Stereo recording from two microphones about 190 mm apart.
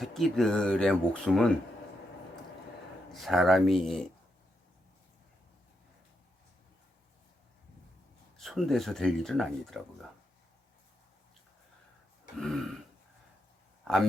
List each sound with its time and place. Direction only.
0.0 s speech: centre (ahead or behind)
3.1 s speech: centre (ahead or behind)
8.4 s speech: centre (ahead or behind)
12.4 s speech: centre (ahead or behind)